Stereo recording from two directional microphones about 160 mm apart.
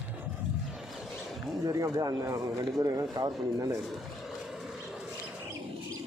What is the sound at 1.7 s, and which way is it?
Speech, 20° right (ahead or behind).